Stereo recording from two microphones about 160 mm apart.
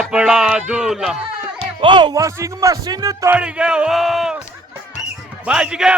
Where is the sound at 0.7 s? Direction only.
5° right (ahead or behind).